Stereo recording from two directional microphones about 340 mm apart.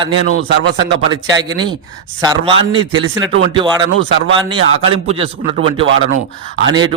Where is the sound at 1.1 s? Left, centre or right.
Centre.